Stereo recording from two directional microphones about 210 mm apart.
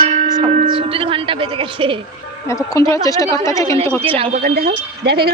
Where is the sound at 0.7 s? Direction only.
25° right (ahead or behind).